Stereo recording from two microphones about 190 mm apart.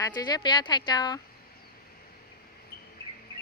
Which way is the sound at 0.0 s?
20° left (ahead or behind).